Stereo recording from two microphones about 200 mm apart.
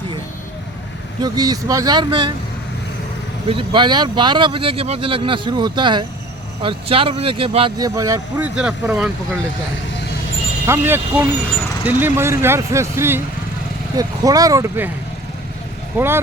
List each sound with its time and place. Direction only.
1.2 s speech: 20° right (ahead or behind)
3.4 s speech: 25° right (ahead or behind)
8.5 s speech: 5° right (ahead or behind)
10.7 s speech: 10° right (ahead or behind)
16.0 s speech: 10° right (ahead or behind)